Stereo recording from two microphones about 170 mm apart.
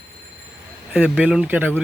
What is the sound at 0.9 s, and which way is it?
Speech, 5° right (ahead or behind).